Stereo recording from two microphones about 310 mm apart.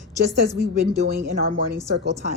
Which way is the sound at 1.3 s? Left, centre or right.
Right.